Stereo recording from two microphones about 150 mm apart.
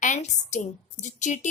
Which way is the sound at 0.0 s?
55° left (ahead or behind).